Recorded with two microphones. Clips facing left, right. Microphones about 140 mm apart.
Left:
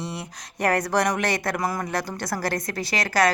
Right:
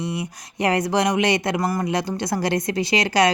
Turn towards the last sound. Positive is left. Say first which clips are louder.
# right 3 dB
turn(degrees=-20)  # may be behind; listen again after turning